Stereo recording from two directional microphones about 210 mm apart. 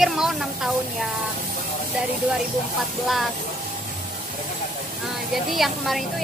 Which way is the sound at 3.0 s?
Centre (ahead or behind).